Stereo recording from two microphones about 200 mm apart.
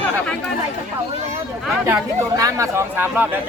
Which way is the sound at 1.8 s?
15° right (ahead or behind).